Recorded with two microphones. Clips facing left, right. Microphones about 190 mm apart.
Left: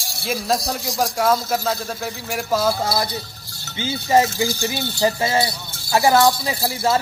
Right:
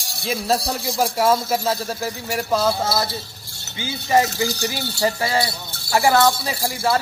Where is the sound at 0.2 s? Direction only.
Centre (ahead or behind).